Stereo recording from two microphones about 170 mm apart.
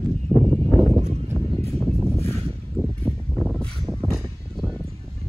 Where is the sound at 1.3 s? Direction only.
10° left (ahead or behind).